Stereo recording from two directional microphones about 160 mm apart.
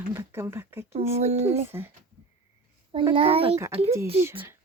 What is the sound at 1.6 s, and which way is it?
Music, 15° right (ahead or behind).